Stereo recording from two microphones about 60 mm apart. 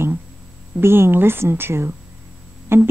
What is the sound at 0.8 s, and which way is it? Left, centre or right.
Speech, right.